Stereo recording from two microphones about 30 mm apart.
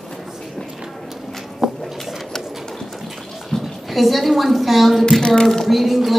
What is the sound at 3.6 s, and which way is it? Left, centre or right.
A woman's voice, centre.